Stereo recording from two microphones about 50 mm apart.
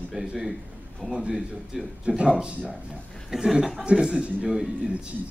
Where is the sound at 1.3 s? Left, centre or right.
Centre.